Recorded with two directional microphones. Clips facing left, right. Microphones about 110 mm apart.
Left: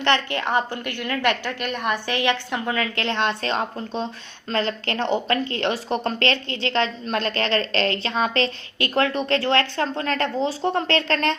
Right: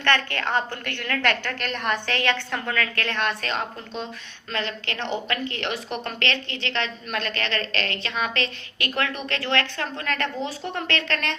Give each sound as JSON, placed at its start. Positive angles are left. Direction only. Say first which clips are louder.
{"t": 0.0, "sound": "a woman's voice", "louder": "left 2 dB", "side_deg": 15}